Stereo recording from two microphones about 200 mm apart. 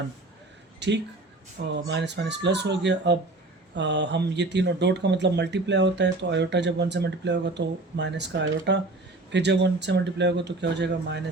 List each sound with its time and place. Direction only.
0.8 s speech: 60° right (ahead or behind)